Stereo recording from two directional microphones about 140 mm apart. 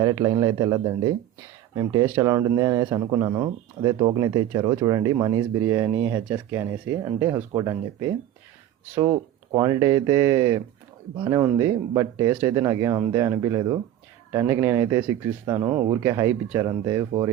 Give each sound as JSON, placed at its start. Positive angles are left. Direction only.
{"t": 0.0, "sound": "speech", "side_deg": -30}
{"t": 9.6, "sound": "speech", "side_deg": -25}